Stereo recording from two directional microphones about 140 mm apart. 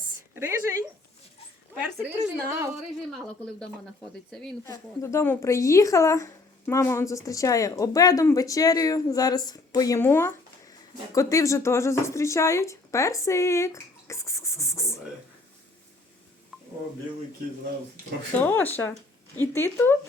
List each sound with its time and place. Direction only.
0.3 s a woman's voice: 20° right (ahead or behind)
2.3 s speech: 20° right (ahead or behind)
3.1 s speech: 5° left (ahead or behind)
4.6 s speech: 20° left (ahead or behind)
16.5 s a sound: 5° right (ahead or behind)
18.3 s speech: 15° left (ahead or behind)